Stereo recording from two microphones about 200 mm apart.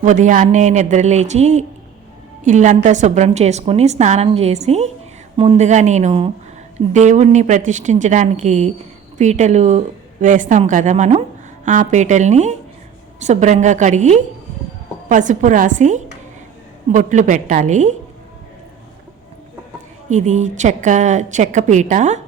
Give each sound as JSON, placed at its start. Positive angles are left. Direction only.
{"t": 0.0, "sound": "a woman's voice", "side_deg": -40}
{"t": 20.1, "sound": "a woman's voice", "side_deg": -35}